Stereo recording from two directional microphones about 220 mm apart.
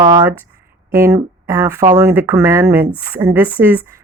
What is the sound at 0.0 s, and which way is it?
A woman's voice, 15° right (ahead or behind).